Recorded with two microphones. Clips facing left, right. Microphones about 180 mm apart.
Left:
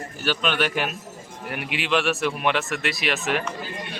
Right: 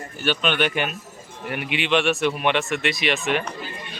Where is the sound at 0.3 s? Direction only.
Centre (ahead or behind).